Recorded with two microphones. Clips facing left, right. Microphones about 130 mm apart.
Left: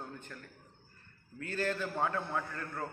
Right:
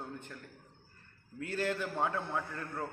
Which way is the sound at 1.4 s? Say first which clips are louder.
Even; 15° right (ahead or behind).